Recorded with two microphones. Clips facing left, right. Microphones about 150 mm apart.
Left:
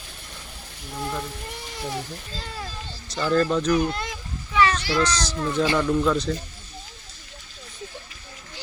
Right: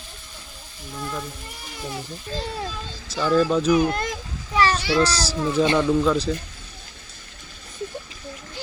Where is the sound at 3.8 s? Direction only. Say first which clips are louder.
Right 4 dB; 45° right (ahead or behind).